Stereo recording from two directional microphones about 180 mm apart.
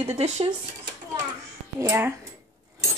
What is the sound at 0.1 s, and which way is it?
Cutlery, 35° right (ahead or behind).